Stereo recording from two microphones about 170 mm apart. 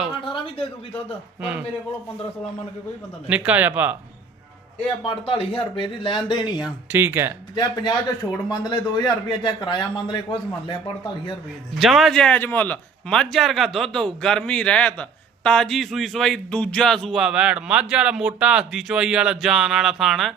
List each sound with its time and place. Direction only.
0.3 s a sound: 30° left (ahead or behind)
3.2 s speech: 10° right (ahead or behind)
5.3 s a man's voice: 30° left (ahead or behind)
6.6 s speech: 10° right (ahead or behind)
7.5 s a man's voice: 25° left (ahead or behind)
11.8 s speech: centre (ahead or behind)